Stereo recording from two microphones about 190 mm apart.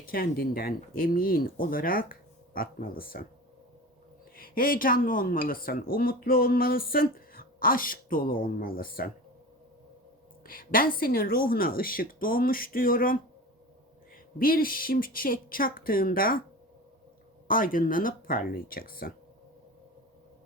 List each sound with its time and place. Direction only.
0.0 s speech: 50° left (ahead or behind)
4.4 s speech: 50° left (ahead or behind)
10.4 s speech: 50° left (ahead or behind)
14.3 s speech: 50° left (ahead or behind)
17.5 s speech: 45° left (ahead or behind)